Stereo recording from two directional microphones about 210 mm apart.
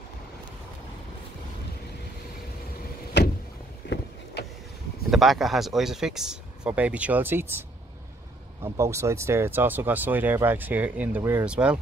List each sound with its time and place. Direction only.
3.2 s vehicle: 55° left (ahead or behind)
5.1 s speech: centre (ahead or behind)
8.6 s speech: 15° right (ahead or behind)